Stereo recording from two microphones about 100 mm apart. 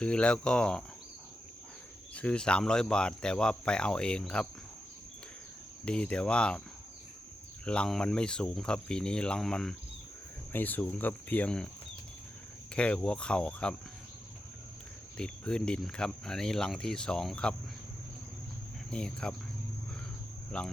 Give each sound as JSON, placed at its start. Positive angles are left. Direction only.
{"t": 0.0, "sound": "speech", "side_deg": 10}
{"t": 2.1, "sound": "speech", "side_deg": 10}
{"t": 5.8, "sound": "speech", "side_deg": 10}
{"t": 7.6, "sound": "speech", "side_deg": 10}
{"t": 10.5, "sound": "speech", "side_deg": 20}
{"t": 12.7, "sound": "speech", "side_deg": 10}
{"t": 15.2, "sound": "speech", "side_deg": 10}
{"t": 18.9, "sound": "speech", "side_deg": 10}
{"t": 20.5, "sound": "speech", "side_deg": 10}